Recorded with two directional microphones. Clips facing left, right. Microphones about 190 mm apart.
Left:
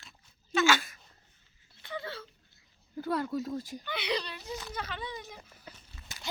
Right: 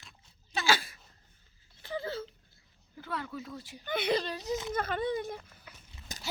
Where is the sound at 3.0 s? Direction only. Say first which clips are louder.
Left 7 dB; 40° left (ahead or behind).